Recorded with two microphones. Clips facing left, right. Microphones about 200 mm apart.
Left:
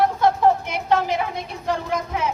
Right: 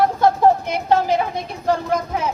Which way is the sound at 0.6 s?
35° right (ahead or behind).